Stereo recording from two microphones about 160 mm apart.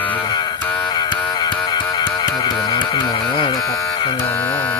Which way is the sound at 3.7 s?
25° left (ahead or behind).